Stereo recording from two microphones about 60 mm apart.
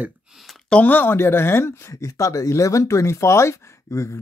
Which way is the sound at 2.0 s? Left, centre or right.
Left.